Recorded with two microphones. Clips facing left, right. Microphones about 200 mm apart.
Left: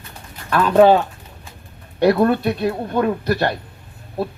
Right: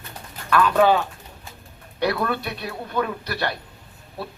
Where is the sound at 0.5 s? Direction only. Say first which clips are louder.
Left 5 dB; 40° left (ahead or behind).